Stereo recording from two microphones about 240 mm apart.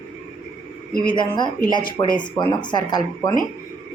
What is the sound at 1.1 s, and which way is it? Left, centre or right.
A woman's voice, centre.